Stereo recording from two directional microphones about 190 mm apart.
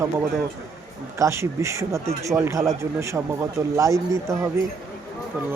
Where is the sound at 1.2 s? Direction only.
15° right (ahead or behind).